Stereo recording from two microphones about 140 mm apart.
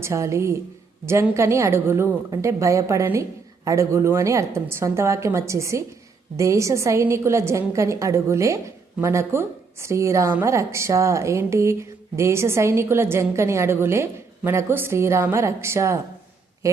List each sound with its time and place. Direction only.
0.0 s a woman's voice: 20° right (ahead or behind)